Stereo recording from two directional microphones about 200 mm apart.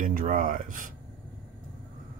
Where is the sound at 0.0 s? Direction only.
45° right (ahead or behind).